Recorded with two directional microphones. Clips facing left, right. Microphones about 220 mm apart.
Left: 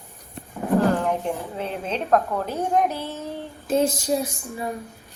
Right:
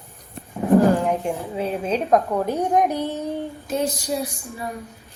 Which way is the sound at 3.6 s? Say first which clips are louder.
Left 4 dB; 25° left (ahead or behind).